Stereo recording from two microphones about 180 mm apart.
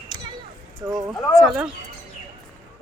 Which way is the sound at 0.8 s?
20° right (ahead or behind).